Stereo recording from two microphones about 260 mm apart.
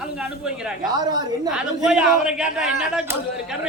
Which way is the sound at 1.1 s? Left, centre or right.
Centre.